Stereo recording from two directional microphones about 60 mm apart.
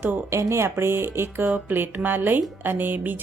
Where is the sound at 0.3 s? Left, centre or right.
Right.